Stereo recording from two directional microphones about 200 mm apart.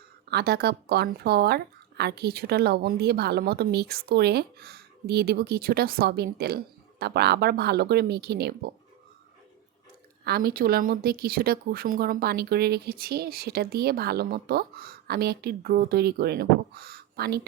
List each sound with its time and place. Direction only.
0.3 s speech: 55° right (ahead or behind)
10.2 s speech: 50° right (ahead or behind)